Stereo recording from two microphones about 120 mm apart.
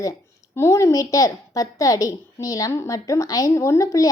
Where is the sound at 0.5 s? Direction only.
25° left (ahead or behind).